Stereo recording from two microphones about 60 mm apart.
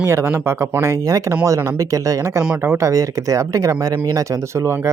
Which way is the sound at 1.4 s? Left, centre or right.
Right.